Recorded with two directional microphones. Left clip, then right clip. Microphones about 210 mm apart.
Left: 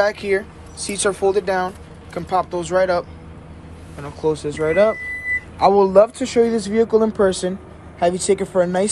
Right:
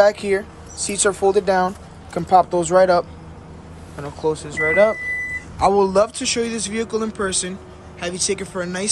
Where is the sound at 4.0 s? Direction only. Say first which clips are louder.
Left 1 dB; 10° right (ahead or behind).